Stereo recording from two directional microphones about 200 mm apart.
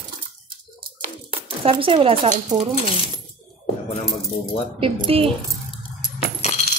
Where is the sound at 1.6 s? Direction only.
25° right (ahead or behind).